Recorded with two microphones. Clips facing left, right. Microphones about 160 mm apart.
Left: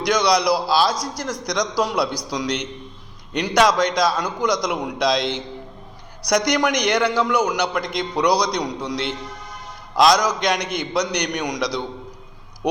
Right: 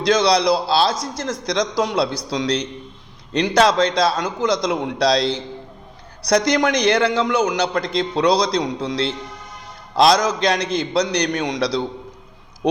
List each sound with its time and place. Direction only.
0.0 s a man's voice: 25° right (ahead or behind)